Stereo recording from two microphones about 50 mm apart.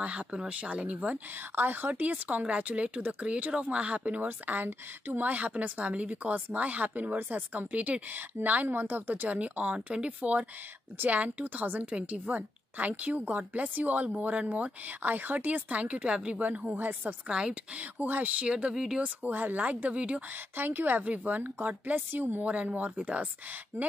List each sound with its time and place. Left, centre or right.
0.0 s speech: right
4.2 s a woman's voice: right
5.3 s a woman's voice: right
16.3 s a woman's voice: right
17.3 s speech: centre
17.7 s a woman's voice: right
19.2 s speech: right
20.5 s a woman's voice: right
22.1 s a woman's voice: right
22.4 s speech: right
23.7 s a woman's voice: right